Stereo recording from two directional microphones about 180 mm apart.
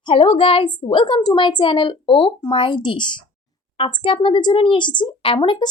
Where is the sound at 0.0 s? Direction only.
30° left (ahead or behind).